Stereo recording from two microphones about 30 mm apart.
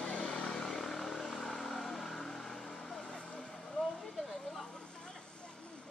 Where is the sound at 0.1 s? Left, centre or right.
Left.